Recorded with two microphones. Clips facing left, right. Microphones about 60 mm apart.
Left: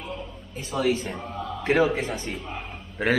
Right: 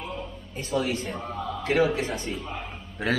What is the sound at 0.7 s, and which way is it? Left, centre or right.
Speech, left.